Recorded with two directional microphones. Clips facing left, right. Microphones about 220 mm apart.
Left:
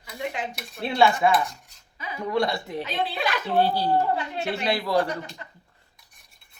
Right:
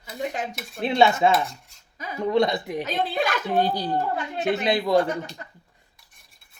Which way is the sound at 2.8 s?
45° right (ahead or behind).